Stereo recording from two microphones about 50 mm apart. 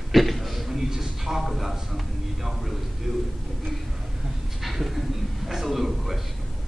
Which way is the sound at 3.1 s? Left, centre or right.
Centre.